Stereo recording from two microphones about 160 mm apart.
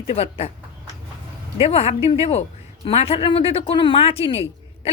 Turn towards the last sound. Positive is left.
turn(degrees=35)  # may be behind; listen again after turning